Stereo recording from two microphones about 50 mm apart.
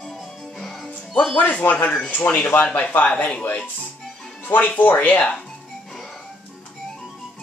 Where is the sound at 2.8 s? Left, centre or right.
Left.